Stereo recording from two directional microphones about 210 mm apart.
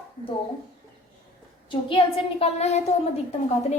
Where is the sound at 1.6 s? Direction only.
25° left (ahead or behind).